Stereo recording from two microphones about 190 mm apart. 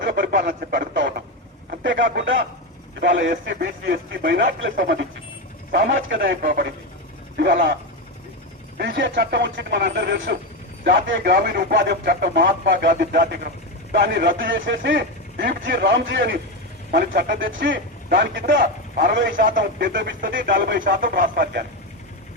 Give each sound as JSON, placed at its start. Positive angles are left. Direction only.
{"t": 0.0, "sound": "speech", "side_deg": -60}
{"t": 1.8, "sound": "speech", "side_deg": -70}
{"t": 5.7, "sound": "speech", "side_deg": -65}
{"t": 6.4, "sound": "speech", "side_deg": -50}
{"t": 8.8, "sound": "speech", "side_deg": -65}
{"t": 19.9, "sound": "speech", "side_deg": -70}
{"t": 20.4, "sound": "speech", "side_deg": -50}